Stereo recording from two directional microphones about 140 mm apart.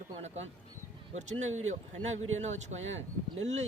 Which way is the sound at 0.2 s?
50° right (ahead or behind).